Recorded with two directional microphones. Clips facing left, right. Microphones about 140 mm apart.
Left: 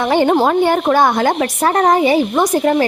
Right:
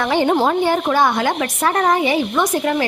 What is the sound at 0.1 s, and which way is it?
A woman's voice, 50° left (ahead or behind).